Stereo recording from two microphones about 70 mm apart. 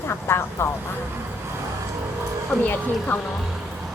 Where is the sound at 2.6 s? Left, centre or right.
Left.